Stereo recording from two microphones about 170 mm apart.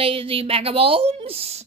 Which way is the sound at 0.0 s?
30° right (ahead or behind).